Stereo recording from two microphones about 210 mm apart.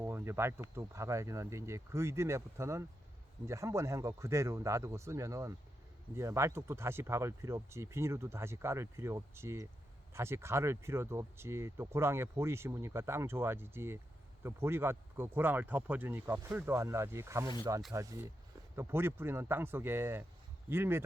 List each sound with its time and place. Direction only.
0.0 s speech: 10° right (ahead or behind)